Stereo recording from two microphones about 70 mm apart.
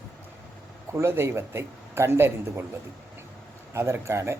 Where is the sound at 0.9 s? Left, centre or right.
Right.